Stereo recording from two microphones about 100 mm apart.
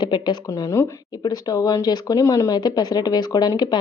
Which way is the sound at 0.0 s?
50° left (ahead or behind).